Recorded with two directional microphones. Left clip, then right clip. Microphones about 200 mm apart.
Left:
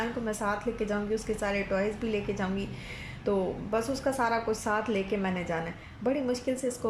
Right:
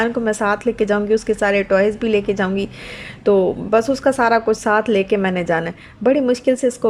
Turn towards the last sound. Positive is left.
turn(degrees=-45)  # may be behind; listen again after turning